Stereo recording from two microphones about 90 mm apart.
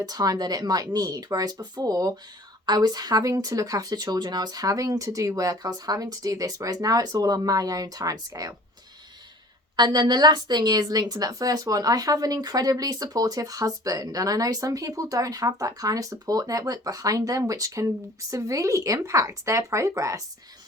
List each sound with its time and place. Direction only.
0.0 s speech: 45° right (ahead or behind)
9.7 s a woman's voice: 50° right (ahead or behind); by 20.2 s 35° right (ahead or behind)